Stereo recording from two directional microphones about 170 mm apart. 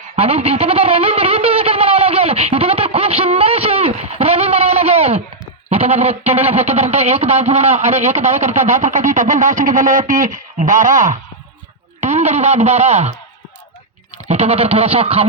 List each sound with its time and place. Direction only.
0.2 s music: 35° right (ahead or behind)
5.6 s speech: 35° right (ahead or behind)
14.3 s speech: 35° right (ahead or behind)